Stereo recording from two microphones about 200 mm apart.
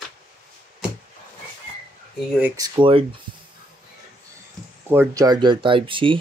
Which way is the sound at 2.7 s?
25° right (ahead or behind).